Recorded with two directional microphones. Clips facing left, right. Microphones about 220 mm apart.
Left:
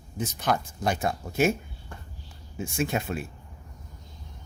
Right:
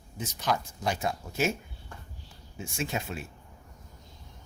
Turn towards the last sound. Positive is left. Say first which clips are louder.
# left 5 dB
turn(degrees=55)  # may be behind; listen again after turning